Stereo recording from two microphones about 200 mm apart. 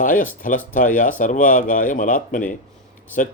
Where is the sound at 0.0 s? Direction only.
40° left (ahead or behind).